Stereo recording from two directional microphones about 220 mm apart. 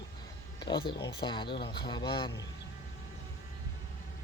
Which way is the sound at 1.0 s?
20° left (ahead or behind).